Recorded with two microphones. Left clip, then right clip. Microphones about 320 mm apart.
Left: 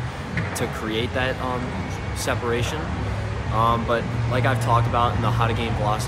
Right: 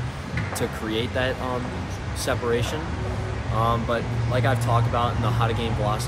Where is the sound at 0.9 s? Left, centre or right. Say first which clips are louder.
Left 1 dB; centre.